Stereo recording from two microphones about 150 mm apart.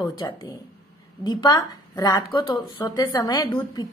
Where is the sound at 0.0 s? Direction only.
30° left (ahead or behind).